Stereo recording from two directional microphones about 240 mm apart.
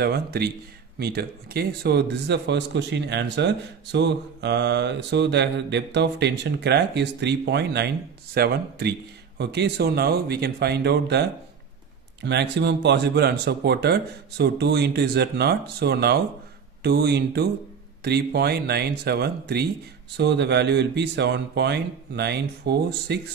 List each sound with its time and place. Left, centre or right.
0.0 s speech: right